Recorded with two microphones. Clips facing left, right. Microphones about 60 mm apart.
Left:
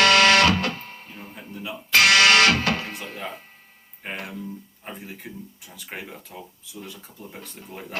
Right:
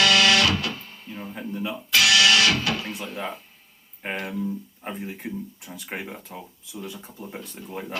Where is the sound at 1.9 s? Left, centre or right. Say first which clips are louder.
Left 3 dB; left.